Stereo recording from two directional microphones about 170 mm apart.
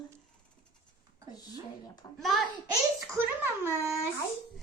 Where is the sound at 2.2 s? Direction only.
Centre (ahead or behind).